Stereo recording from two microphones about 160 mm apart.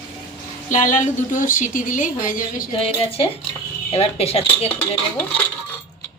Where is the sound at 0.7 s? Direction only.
50° left (ahead or behind).